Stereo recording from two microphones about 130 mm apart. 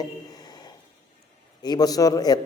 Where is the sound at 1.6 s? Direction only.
30° left (ahead or behind).